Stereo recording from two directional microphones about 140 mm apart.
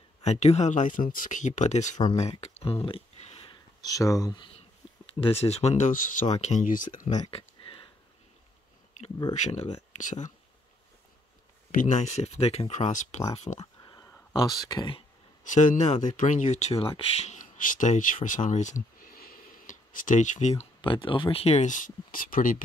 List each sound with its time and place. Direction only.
0.2 s speech: 50° left (ahead or behind)
2.1 s a sound: 50° left (ahead or behind)
3.8 s speech: 25° left (ahead or behind)
5.1 s speech: 45° left (ahead or behind); by 7.2 s 65° left (ahead or behind)
7.2 s a sound: 40° left (ahead or behind)
9.3 s speech: 55° left (ahead or behind)
11.7 s speech: 60° left (ahead or behind)
14.1 s speech: 30° left (ahead or behind)
15.4 s speech: 65° left (ahead or behind)
20.8 s speech: 35° left (ahead or behind); by 22.6 s 75° left (ahead or behind)